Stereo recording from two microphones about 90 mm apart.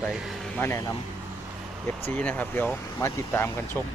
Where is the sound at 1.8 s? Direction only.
20° left (ahead or behind).